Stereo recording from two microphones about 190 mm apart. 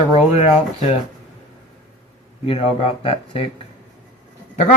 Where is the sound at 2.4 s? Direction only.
30° left (ahead or behind).